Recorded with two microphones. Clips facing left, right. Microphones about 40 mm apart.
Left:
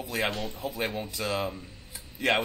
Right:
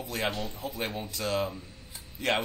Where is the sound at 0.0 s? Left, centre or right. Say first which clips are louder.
Left 2 dB; centre.